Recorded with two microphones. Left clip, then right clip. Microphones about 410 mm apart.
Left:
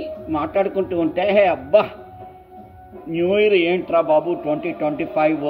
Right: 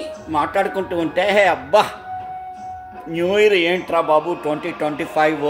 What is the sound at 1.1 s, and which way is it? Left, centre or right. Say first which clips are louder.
Speech: right 1 dB; right.